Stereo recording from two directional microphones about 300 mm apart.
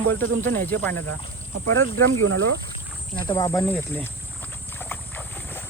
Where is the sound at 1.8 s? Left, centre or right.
Right.